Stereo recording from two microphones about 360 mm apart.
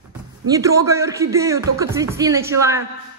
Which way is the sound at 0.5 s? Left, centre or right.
Centre.